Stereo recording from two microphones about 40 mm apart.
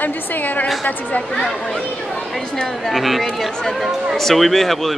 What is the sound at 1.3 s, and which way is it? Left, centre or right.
Speech, centre.